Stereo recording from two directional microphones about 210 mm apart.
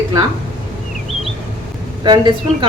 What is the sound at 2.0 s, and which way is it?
Speech, 20° right (ahead or behind).